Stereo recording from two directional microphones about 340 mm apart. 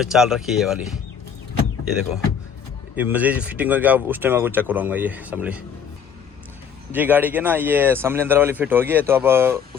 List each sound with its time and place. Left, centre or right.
0.0 s speech: centre
2.9 s speech: centre
6.9 s speech: centre